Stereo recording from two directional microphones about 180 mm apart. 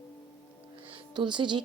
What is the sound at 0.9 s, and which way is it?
Speech, 25° right (ahead or behind).